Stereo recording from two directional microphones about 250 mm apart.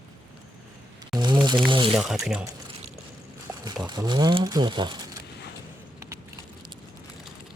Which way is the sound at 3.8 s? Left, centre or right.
Centre.